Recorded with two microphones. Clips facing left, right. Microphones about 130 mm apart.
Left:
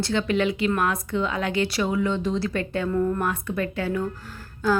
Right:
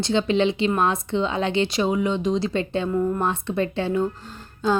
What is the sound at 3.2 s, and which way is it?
A woman's voice, 25° right (ahead or behind).